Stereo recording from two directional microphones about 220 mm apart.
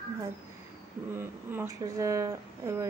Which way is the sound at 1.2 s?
10° right (ahead or behind).